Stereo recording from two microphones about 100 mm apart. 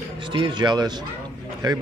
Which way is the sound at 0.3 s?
50° right (ahead or behind).